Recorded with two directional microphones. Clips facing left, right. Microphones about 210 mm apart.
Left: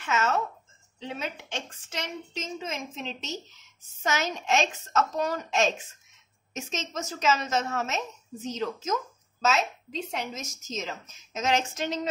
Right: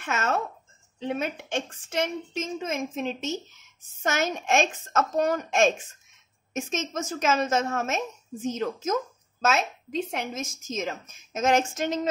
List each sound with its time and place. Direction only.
0.0 s a woman's voice: 50° right (ahead or behind)